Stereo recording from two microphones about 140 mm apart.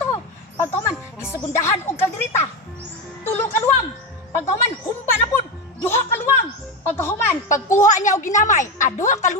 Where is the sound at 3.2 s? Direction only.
15° left (ahead or behind).